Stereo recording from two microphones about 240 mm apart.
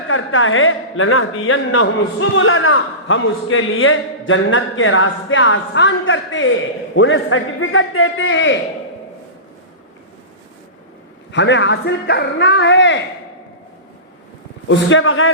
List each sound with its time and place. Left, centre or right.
0.1 s a man's voice: left
11.3 s a man's voice: left
14.7 s speech: left